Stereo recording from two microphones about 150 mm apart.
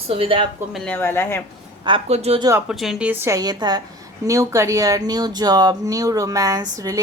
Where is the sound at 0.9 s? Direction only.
15° left (ahead or behind).